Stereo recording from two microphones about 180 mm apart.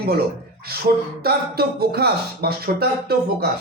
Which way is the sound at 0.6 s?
60° right (ahead or behind).